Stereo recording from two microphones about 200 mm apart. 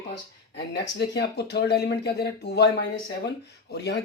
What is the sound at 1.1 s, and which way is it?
Speech, 55° left (ahead or behind).